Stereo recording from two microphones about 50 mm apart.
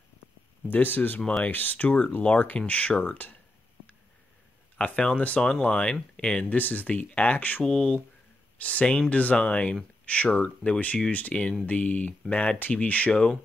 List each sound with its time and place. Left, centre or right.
0.7 s speech: left
4.7 s speech: left
6.5 s speech: left
7.6 s speech: centre
8.5 s speech: left
13.1 s speech: centre